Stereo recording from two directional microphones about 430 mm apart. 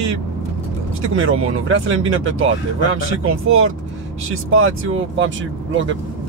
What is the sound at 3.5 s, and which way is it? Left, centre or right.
Speech, right.